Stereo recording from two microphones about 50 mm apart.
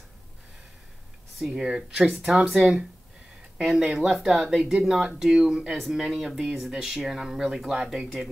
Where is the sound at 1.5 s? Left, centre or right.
Centre.